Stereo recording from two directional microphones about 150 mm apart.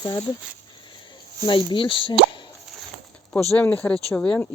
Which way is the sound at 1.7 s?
35° left (ahead or behind).